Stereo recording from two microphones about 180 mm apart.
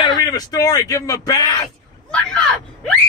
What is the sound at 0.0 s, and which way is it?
Speech, 25° left (ahead or behind).